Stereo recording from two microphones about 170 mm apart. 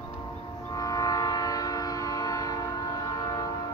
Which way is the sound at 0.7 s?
20° left (ahead or behind).